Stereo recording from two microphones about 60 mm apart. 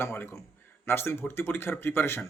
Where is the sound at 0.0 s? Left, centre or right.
Left.